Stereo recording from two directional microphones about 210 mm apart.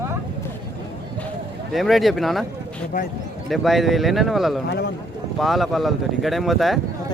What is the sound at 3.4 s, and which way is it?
Speech, centre (ahead or behind).